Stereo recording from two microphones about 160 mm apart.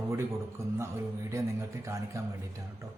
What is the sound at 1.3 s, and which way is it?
Speech, 20° right (ahead or behind).